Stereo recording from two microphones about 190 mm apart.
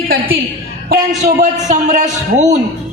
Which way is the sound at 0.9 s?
40° right (ahead or behind).